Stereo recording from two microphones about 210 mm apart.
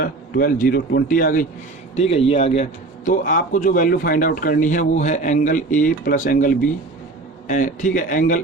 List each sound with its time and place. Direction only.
0.0 s a man's voice: 45° left (ahead or behind)
2.0 s a man's voice: 30° left (ahead or behind)